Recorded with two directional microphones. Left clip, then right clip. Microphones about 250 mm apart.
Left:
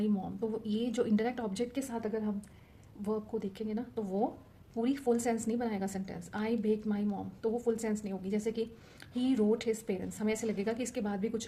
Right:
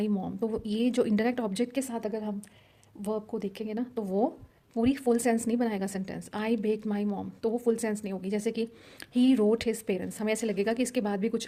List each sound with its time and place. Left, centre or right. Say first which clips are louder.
0.0 s a woman's voice: right 4 dB; right